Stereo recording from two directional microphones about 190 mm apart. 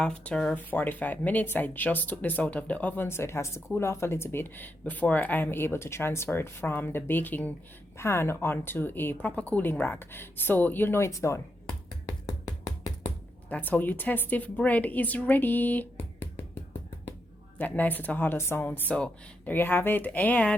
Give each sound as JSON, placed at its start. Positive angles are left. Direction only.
{"t": 0.0, "sound": "speech", "side_deg": 5}
{"t": 12.0, "sound": "finger snapping", "side_deg": 15}
{"t": 13.5, "sound": "speech", "side_deg": 10}
{"t": 17.6, "sound": "speech", "side_deg": 10}